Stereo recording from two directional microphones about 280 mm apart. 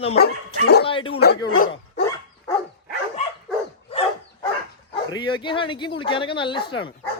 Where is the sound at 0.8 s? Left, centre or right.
Centre.